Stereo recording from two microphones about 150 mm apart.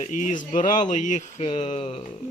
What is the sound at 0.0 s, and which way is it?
Speech, 55° left (ahead or behind).